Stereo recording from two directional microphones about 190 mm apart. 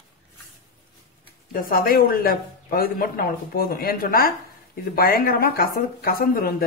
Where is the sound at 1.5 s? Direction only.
50° left (ahead or behind).